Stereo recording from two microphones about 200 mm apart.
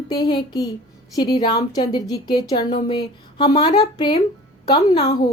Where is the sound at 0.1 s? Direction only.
20° left (ahead or behind).